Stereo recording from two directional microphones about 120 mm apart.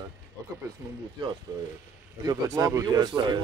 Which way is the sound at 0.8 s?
20° right (ahead or behind).